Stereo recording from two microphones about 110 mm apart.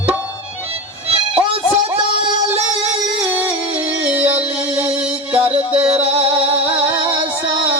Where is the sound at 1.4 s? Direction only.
55° right (ahead or behind).